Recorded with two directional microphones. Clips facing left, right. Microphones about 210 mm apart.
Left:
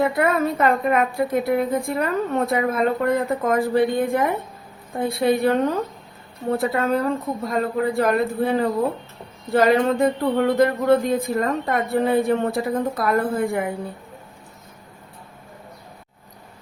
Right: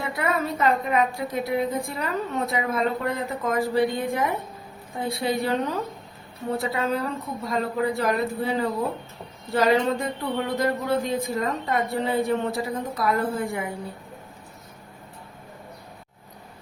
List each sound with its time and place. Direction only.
0.0 s a woman's voice: 50° left (ahead or behind)